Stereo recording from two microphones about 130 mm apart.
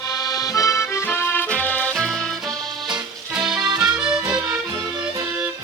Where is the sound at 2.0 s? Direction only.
Centre (ahead or behind).